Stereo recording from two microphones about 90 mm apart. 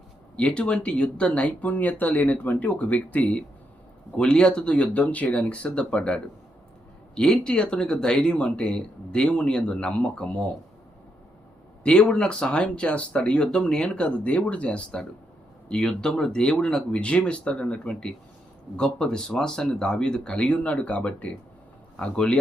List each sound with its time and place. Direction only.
0.3 s speech: 10° left (ahead or behind)
11.8 s speech: 10° left (ahead or behind)